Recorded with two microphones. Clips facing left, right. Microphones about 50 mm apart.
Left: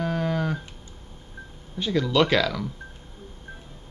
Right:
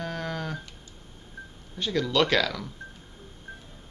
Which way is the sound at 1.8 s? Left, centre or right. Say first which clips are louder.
Left 3 dB; centre.